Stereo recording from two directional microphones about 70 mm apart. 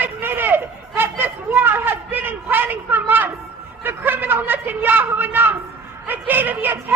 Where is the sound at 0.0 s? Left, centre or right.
Right.